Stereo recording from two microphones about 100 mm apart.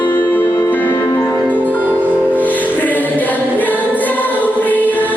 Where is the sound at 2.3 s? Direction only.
15° left (ahead or behind).